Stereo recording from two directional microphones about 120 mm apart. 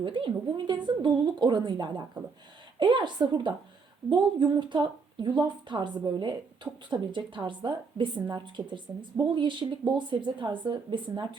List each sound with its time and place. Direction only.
0.0 s a woman's voice: 45° right (ahead or behind)